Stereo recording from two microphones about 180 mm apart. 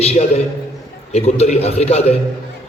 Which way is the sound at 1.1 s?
35° left (ahead or behind).